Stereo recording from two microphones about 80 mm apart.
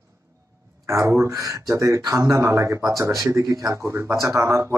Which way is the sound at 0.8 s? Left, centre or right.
Right.